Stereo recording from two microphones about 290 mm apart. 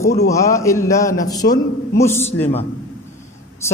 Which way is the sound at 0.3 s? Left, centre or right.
Centre.